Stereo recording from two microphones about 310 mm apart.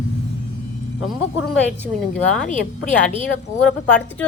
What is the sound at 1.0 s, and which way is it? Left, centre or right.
Speech, centre.